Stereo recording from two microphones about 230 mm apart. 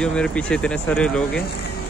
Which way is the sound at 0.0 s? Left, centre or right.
Centre.